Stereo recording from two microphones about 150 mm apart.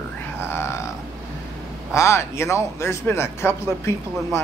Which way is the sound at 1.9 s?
20° left (ahead or behind).